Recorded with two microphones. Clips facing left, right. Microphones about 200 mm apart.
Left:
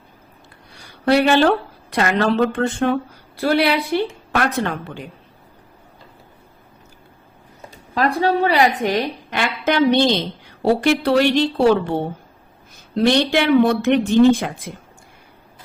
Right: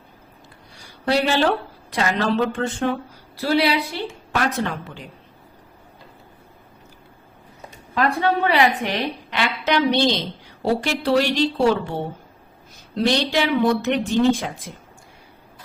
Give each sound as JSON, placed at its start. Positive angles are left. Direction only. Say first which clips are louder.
{"t": 1.0, "sound": "a woman's voice", "louder": "left 5 dB", "side_deg": 60}
{"t": 8.2, "sound": "a woman's voice", "louder": "left 3 dB", "side_deg": 35}
{"t": 10.6, "sound": "a woman's voice", "louder": "left 5 dB", "side_deg": 60}
{"t": 13.0, "sound": "a woman's voice", "louder": "left 4 dB", "side_deg": 55}